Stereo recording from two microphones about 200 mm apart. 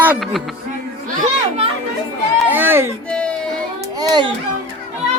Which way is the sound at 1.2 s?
30° right (ahead or behind).